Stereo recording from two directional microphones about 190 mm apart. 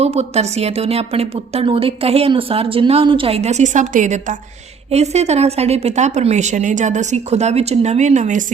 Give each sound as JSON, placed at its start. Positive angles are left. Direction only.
{"t": 0.0, "sound": "a woman's voice", "side_deg": -35}